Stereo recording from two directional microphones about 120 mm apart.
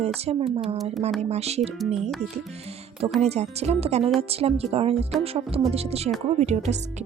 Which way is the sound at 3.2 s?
65° right (ahead or behind).